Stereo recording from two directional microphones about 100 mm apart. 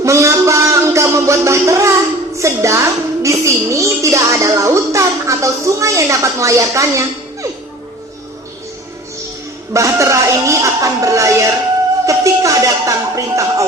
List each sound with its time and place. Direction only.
0.0 s music: 30° right (ahead or behind)
2.4 s a sound: 30° right (ahead or behind)
9.7 s speech: 30° right (ahead or behind)